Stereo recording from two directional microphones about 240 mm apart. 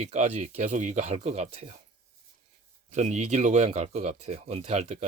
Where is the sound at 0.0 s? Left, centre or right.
Right.